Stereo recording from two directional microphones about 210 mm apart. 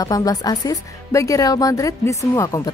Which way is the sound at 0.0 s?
15° left (ahead or behind).